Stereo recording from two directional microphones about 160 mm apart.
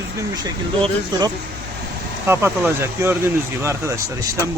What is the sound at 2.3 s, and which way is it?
Speech, 15° right (ahead or behind).